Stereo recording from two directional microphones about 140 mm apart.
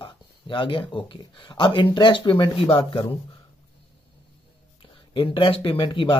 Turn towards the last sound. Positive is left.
turn(degrees=40)  # may be behind; listen again after turning